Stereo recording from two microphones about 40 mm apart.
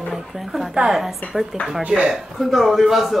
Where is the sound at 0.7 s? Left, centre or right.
Centre.